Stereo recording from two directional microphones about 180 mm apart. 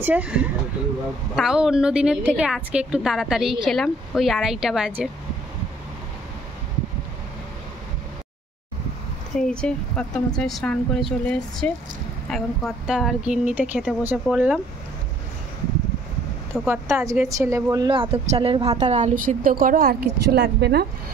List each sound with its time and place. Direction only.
0.0 s a woman's voice: 10° right (ahead or behind)
9.5 s a woman's voice: 5° left (ahead or behind)
16.6 s a woman's voice: 10° right (ahead or behind); by 20.8 s 65° right (ahead or behind)